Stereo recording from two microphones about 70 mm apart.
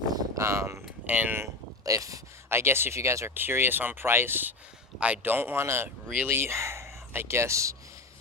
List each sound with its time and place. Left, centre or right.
0.3 s speech: right
1.0 s speech: right
1.8 s speech: right
2.5 s speech: right
3.3 s speech: right
4.9 s speech: centre
5.2 s speech: right